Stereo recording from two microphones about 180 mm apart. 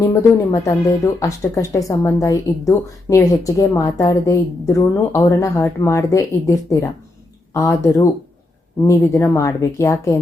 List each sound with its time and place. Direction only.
0.0 s speech: 15° left (ahead or behind)